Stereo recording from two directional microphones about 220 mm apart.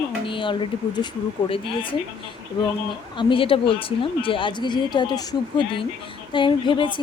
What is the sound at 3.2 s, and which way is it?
Speech, 25° left (ahead or behind).